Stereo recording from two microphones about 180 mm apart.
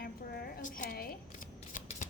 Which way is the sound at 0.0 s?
60° left (ahead or behind).